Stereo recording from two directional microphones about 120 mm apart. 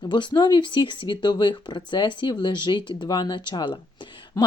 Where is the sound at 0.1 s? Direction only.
40° left (ahead or behind).